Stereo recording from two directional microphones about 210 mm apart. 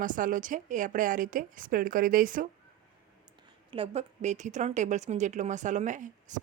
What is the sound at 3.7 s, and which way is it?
A woman's voice, 30° right (ahead or behind).